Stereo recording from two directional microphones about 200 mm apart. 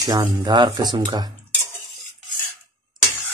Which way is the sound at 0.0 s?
15° right (ahead or behind).